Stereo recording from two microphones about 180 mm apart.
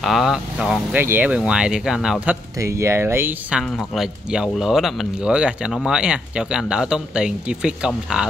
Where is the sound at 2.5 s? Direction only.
15° right (ahead or behind).